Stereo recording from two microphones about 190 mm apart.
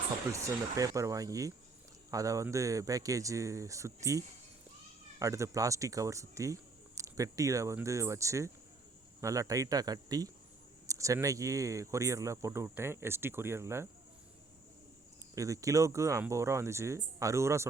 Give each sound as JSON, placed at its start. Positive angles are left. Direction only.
{"t": 0.3, "sound": "speech", "side_deg": -15}
{"t": 5.2, "sound": "speech", "side_deg": -15}
{"t": 15.4, "sound": "speech", "side_deg": -15}